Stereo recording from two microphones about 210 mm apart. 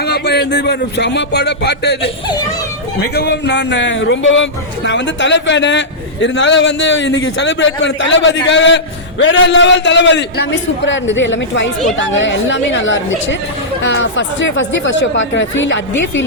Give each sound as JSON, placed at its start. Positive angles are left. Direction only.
{"t": 0.0, "sound": "a man's voice", "side_deg": 50}